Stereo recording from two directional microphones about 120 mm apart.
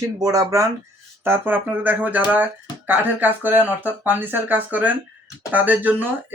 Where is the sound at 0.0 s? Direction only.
30° right (ahead or behind).